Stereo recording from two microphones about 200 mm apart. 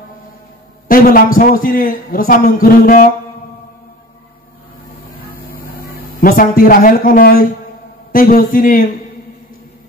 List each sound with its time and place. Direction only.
0.8 s a man's voice: 45° left (ahead or behind)
5.3 s vehicle: 45° left (ahead or behind)
6.2 s a man's voice: 45° left (ahead or behind)